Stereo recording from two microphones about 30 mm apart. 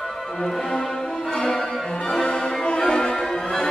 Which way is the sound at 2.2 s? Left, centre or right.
Left.